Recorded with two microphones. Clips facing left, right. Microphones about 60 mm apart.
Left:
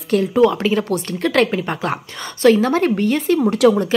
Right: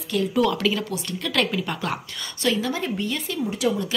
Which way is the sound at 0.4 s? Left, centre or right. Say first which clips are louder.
Left 6 dB; left.